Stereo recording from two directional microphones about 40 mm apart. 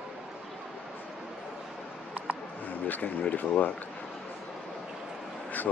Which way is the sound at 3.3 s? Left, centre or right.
Left.